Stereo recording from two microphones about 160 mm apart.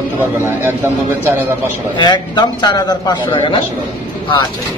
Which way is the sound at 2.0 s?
25° left (ahead or behind).